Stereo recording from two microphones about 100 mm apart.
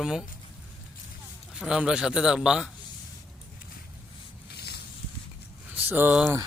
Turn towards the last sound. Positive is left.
turn(degrees=-15)  # may be behind; listen again after turning